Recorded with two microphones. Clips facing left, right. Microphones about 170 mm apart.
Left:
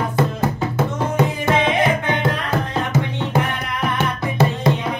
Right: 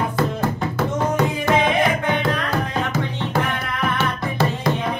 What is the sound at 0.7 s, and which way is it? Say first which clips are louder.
Music: even; 20° left (ahead or behind).